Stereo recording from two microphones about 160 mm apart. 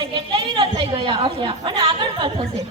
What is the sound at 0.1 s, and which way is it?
A woman's voice, 30° right (ahead or behind).